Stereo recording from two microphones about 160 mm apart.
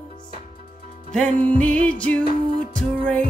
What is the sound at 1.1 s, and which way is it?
Music, 5° left (ahead or behind).